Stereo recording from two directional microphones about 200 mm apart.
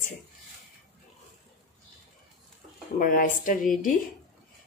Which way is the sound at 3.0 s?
45° left (ahead or behind).